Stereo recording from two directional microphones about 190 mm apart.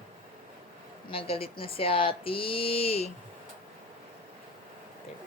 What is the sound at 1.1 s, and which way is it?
Speech, 30° left (ahead or behind).